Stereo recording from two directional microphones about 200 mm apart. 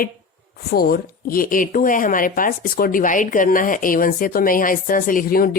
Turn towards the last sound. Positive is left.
turn(degrees=45)  # may be behind; listen again after turning